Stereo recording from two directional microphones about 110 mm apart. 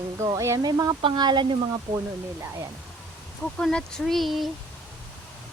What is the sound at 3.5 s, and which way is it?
Speech, 5° left (ahead or behind).